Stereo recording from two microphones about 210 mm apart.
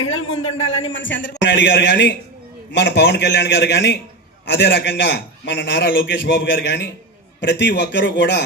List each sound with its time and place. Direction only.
0.0 s a man's voice: 75° left (ahead or behind)
0.9 s a man's voice: 60° left (ahead or behind)